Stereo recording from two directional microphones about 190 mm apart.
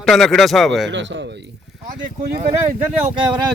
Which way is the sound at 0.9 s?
75° right (ahead or behind).